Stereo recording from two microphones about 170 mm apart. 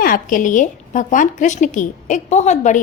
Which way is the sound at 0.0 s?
55° left (ahead or behind).